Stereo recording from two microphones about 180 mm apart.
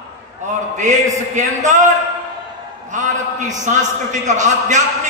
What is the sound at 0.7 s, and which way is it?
A man's voice, 40° right (ahead or behind).